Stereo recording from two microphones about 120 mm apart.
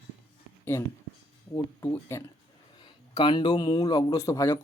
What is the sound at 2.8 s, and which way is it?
Speech, 40° left (ahead or behind).